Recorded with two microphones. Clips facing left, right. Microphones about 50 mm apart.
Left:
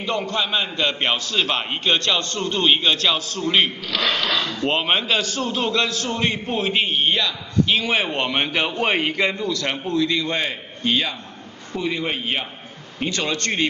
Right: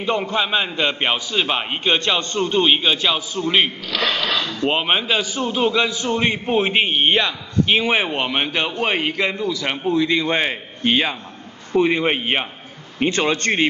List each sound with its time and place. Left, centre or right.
0.0 s a man's voice: centre
4.1 s a sound: centre
4.6 s a man's voice: centre
9.8 s a man's voice: right